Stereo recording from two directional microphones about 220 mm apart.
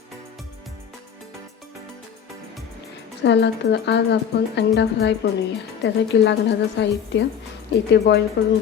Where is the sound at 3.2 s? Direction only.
50° left (ahead or behind).